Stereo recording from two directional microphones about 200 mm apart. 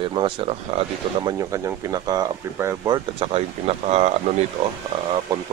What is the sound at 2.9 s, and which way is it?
Speech, 30° right (ahead or behind).